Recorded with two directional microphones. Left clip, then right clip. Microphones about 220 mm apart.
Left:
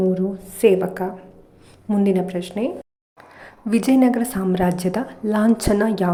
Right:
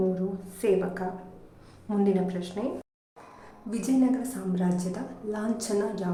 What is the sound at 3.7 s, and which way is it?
A woman's voice, 40° left (ahead or behind).